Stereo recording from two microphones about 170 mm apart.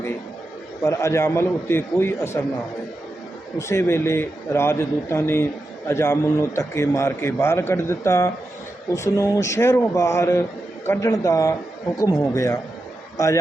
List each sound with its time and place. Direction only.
0.8 s a man's voice: 15° left (ahead or behind)
3.6 s a man's voice: 15° left (ahead or behind)